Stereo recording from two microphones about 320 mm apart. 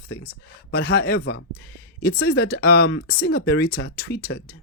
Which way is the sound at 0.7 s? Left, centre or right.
Left.